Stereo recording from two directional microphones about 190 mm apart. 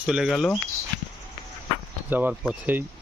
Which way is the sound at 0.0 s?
5° right (ahead or behind).